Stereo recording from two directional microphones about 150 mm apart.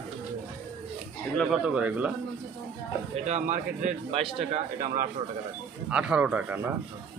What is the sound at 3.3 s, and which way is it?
Speech, 50° right (ahead or behind).